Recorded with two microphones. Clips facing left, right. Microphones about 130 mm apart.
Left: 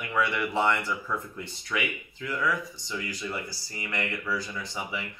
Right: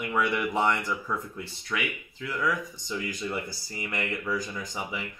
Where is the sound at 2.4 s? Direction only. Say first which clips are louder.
Right 1 dB; 15° right (ahead or behind).